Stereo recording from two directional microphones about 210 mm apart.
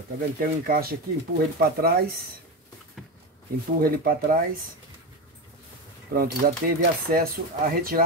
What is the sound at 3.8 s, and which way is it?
Speech, 45° right (ahead or behind).